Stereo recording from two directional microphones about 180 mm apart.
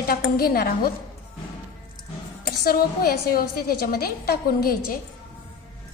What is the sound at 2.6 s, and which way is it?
A woman's voice, 55° left (ahead or behind).